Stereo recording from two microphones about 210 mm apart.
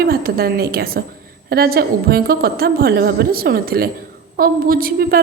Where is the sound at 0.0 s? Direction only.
45° right (ahead or behind).